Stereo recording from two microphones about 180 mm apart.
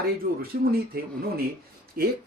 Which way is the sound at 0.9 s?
55° right (ahead or behind).